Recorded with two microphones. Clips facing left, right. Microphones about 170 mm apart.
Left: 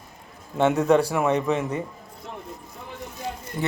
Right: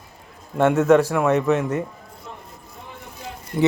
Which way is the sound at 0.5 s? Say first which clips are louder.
Right 3 dB; 5° right (ahead or behind).